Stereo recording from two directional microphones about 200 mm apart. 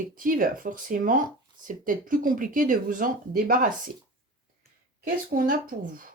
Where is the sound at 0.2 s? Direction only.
45° right (ahead or behind).